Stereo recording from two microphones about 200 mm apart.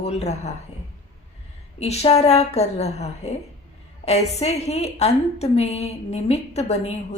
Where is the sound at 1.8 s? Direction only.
30° left (ahead or behind).